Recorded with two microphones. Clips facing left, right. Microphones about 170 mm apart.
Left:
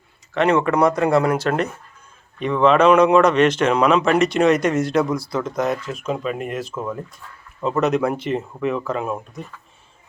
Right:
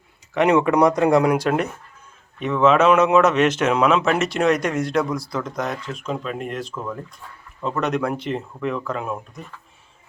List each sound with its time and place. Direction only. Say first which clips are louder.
0.3 s speech: right 1 dB; 15° right (ahead or behind); by 9.4 s centre (ahead or behind)